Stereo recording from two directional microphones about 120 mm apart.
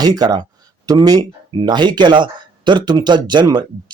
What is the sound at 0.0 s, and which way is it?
Speech, 35° right (ahead or behind).